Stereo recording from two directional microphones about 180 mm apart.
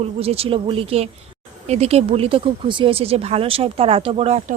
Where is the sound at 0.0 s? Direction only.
35° right (ahead or behind).